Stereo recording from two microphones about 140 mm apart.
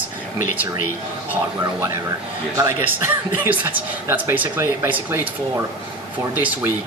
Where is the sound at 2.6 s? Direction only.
20° right (ahead or behind).